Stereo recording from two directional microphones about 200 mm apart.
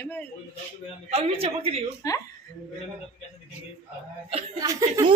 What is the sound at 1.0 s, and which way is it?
Speech, 30° right (ahead or behind).